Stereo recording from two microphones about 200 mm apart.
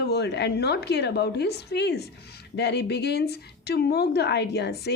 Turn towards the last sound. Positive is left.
turn(degrees=55)  # may be behind; listen again after turning